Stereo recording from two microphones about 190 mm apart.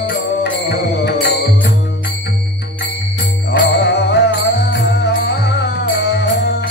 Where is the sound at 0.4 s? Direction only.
60° left (ahead or behind).